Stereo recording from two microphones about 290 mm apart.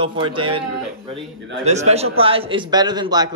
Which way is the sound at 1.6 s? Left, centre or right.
Right.